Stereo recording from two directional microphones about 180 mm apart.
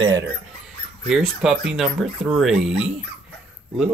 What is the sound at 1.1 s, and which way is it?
Speech, 5° right (ahead or behind).